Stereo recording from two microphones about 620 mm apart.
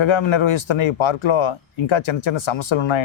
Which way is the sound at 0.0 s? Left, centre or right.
Left.